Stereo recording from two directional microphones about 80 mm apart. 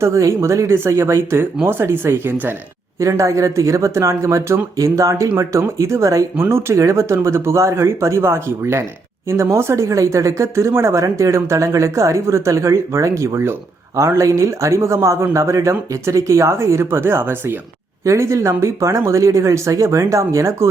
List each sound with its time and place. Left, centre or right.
0.0 s speech: right
3.0 s speech: right
18.0 s speech: right